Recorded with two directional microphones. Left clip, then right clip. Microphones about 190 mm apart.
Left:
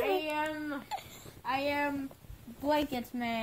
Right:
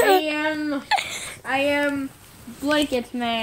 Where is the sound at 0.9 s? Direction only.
10° right (ahead or behind).